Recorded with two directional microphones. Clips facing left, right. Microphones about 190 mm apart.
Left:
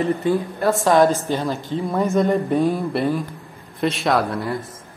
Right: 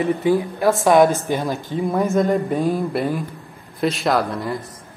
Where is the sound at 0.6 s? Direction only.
15° right (ahead or behind).